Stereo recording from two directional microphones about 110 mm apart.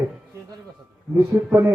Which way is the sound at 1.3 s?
20° right (ahead or behind).